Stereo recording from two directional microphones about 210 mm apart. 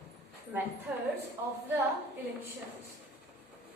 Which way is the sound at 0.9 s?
5° right (ahead or behind).